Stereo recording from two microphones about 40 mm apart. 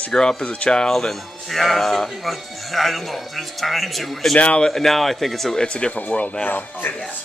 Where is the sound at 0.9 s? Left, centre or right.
Centre.